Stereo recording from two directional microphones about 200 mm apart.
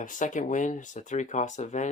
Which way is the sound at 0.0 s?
40° left (ahead or behind).